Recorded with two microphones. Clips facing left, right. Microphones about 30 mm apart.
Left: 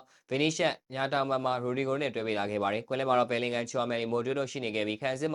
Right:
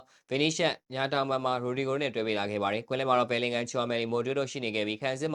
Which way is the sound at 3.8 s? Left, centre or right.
Right.